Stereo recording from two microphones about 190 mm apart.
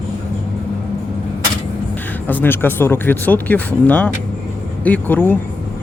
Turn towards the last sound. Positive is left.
turn(degrees=10)  # may be behind; listen again after turning